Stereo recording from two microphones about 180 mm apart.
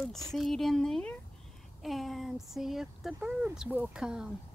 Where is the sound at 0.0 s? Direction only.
Centre (ahead or behind).